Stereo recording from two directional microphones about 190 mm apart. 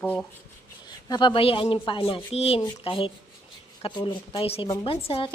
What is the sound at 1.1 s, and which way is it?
A woman's voice, 25° left (ahead or behind).